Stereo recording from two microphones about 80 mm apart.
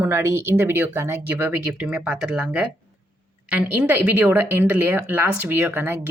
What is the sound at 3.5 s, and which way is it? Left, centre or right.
Speech, right.